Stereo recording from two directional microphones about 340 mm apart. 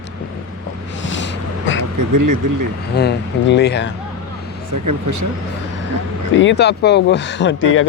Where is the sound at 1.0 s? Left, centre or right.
Left.